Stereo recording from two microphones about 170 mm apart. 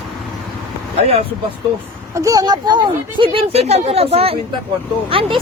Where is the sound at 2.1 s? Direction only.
20° right (ahead or behind).